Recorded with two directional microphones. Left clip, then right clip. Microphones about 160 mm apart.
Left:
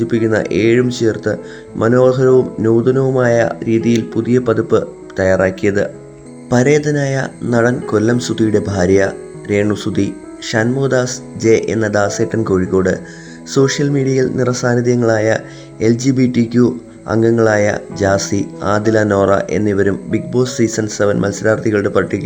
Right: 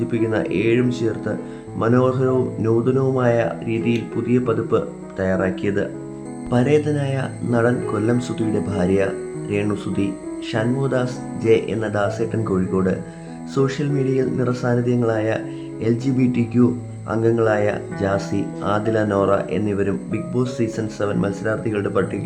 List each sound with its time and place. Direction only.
0.1 s speech: 30° left (ahead or behind)